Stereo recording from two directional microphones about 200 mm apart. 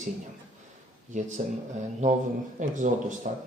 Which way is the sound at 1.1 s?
35° right (ahead or behind).